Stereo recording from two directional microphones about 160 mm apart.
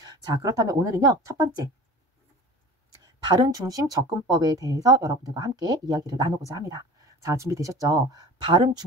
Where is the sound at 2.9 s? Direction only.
25° right (ahead or behind).